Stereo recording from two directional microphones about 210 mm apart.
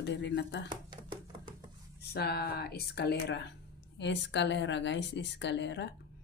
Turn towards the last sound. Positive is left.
turn(degrees=55)  # may be behind; listen again after turning